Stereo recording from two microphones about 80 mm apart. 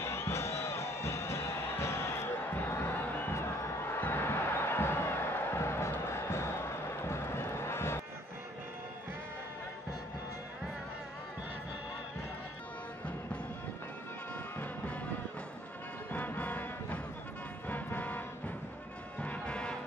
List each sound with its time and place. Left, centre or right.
0.0 s music: left
7.0 s a sound: left
14.3 s music: centre
16.1 s music: left
19.2 s music: centre